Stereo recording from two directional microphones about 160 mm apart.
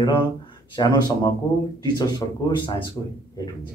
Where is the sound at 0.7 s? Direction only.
25° left (ahead or behind).